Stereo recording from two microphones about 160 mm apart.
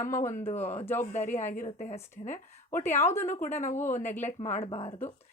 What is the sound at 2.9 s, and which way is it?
Speech, 15° left (ahead or behind).